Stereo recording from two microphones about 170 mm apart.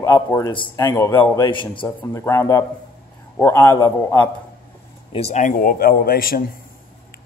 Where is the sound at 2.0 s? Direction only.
15° left (ahead or behind).